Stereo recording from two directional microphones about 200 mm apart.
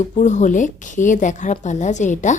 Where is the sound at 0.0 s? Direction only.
35° left (ahead or behind).